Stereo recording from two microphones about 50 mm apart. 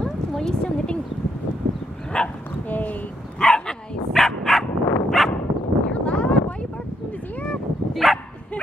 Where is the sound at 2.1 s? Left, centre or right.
Centre.